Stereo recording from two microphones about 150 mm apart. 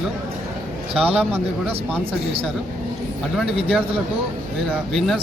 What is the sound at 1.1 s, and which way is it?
Speech, 10° right (ahead or behind).